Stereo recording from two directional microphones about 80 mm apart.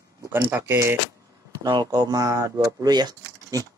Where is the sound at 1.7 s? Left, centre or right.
Right.